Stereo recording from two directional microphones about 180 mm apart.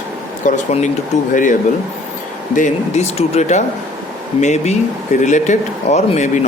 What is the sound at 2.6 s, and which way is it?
Speech, 40° left (ahead or behind).